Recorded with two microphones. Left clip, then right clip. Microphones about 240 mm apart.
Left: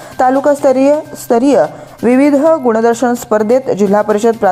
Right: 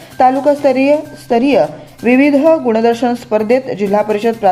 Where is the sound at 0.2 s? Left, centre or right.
Centre.